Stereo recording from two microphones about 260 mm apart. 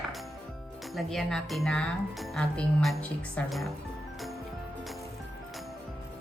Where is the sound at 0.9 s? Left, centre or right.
Centre.